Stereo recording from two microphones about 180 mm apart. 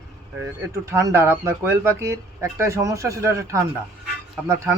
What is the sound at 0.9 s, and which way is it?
Speech, 15° right (ahead or behind).